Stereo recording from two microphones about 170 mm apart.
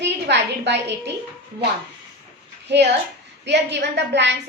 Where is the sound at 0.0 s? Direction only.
90° right.